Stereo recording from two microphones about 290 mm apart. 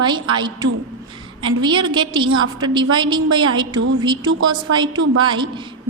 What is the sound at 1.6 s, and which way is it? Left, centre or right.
Speech, centre.